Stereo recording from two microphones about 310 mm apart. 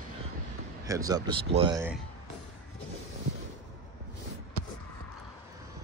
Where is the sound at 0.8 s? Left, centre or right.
Centre.